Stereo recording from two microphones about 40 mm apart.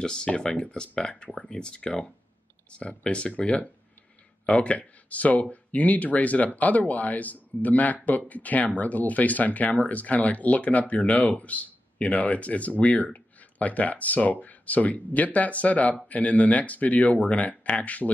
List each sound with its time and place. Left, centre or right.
0.0 s speech: left